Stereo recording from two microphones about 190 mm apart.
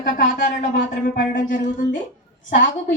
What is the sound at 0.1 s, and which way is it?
Speech, 40° left (ahead or behind).